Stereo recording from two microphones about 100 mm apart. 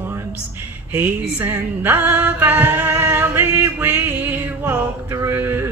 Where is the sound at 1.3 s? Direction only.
20° right (ahead or behind).